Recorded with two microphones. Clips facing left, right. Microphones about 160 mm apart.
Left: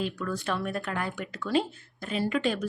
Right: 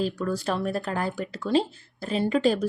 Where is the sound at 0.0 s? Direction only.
35° right (ahead or behind).